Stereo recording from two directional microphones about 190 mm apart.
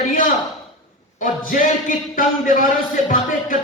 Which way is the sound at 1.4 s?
45° left (ahead or behind).